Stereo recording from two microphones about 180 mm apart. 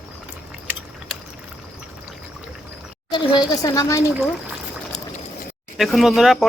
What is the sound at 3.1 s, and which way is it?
Speech, 25° left (ahead or behind).